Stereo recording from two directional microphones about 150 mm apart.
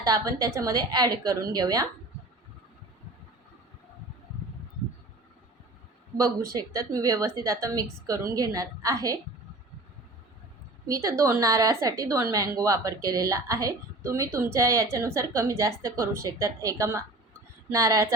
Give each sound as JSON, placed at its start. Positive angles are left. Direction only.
{"t": 0.0, "sound": "a woman's voice", "side_deg": -25}
{"t": 6.1, "sound": "a woman's voice", "side_deg": -20}
{"t": 10.8, "sound": "a woman's voice", "side_deg": -20}